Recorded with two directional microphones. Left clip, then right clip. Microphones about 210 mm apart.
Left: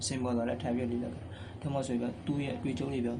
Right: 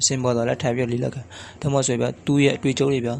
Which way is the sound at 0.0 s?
45° right (ahead or behind).